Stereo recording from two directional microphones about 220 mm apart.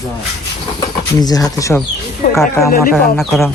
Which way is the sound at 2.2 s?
35° left (ahead or behind).